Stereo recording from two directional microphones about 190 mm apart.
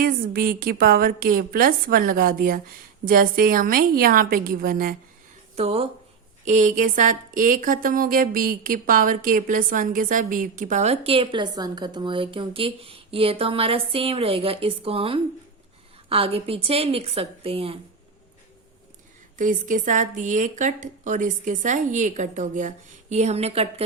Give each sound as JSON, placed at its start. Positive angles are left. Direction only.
{"t": 0.0, "sound": "a woman's voice", "side_deg": -50}
{"t": 5.5, "sound": "speech", "side_deg": -30}
{"t": 19.4, "sound": "speech", "side_deg": -45}